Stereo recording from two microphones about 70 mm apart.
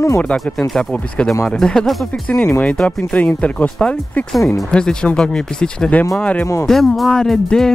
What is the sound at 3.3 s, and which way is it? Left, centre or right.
Speech, centre.